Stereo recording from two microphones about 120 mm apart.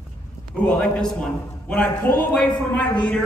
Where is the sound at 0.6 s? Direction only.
10° left (ahead or behind).